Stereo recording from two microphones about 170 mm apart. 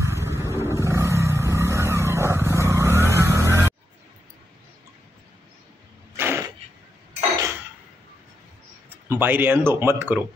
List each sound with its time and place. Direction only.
0.1 s vehicle: 15° right (ahead or behind)
6.1 s a sound: 15° right (ahead or behind)
8.9 s speech: 10° right (ahead or behind)